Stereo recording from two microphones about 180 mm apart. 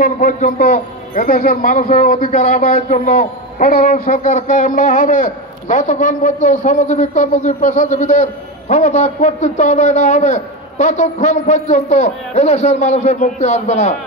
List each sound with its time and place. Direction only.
0.0 s a man's voice: 45° left (ahead or behind)